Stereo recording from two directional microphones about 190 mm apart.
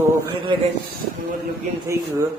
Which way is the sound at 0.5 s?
25° right (ahead or behind).